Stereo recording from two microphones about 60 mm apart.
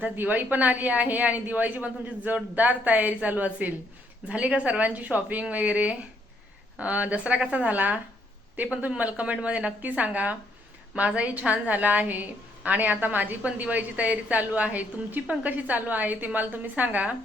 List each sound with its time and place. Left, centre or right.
0.0 s a woman's voice: right